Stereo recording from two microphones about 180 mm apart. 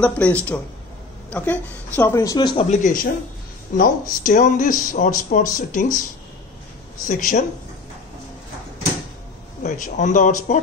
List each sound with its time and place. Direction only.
0.0 s a woman's voice: 5° left (ahead or behind); by 2.6 s 25° left (ahead or behind)
2.7 s speech: 45° left (ahead or behind)
7.1 s speech: 50° left (ahead or behind)
9.6 s speech: 45° left (ahead or behind)